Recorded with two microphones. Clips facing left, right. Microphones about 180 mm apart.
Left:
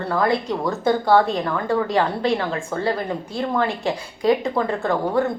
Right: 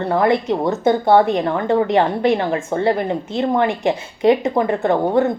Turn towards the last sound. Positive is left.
turn(degrees=-20)  # may be behind; listen again after turning